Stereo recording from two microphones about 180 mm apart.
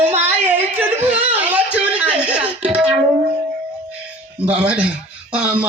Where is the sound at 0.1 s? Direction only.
35° right (ahead or behind).